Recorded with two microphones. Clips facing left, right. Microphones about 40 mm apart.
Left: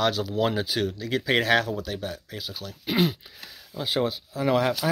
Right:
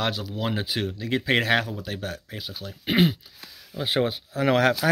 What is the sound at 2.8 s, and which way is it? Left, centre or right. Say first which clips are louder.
Speech: right 3 dB; right.